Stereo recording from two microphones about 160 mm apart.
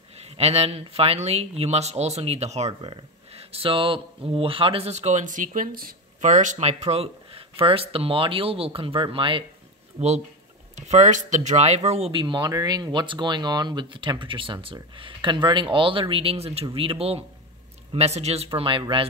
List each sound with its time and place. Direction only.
0.2 s speech: 40° right (ahead or behind)
9.9 s speech: 45° right (ahead or behind)